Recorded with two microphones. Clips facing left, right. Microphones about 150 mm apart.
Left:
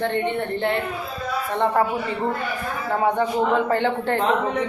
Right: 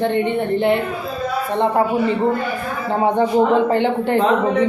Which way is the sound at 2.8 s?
25° right (ahead or behind).